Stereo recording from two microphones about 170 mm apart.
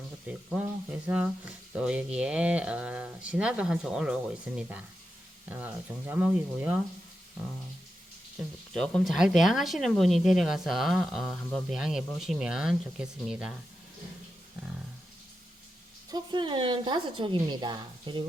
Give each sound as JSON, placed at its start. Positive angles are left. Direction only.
{"t": 0.3, "sound": "speech", "side_deg": -10}
{"t": 8.4, "sound": "speech", "side_deg": 5}
{"t": 16.1, "sound": "a woman's voice", "side_deg": -30}